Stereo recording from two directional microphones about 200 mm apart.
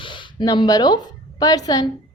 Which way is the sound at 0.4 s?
20° left (ahead or behind).